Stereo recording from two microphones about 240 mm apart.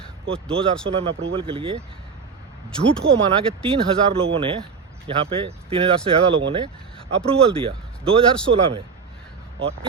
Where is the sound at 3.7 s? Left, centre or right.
Right.